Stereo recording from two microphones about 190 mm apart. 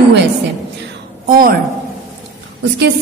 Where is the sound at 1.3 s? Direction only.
50° right (ahead or behind).